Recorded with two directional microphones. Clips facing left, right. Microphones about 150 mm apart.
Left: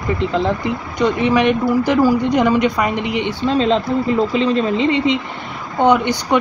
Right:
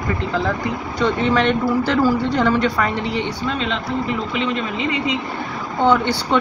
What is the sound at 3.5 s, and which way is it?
Speech, 35° left (ahead or behind).